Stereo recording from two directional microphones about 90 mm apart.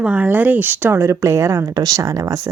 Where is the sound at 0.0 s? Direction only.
20° right (ahead or behind).